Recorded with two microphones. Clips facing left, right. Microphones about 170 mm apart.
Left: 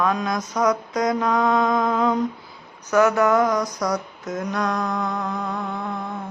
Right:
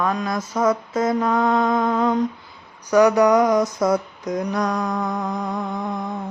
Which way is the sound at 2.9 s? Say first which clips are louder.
Right 3 dB; 15° right (ahead or behind).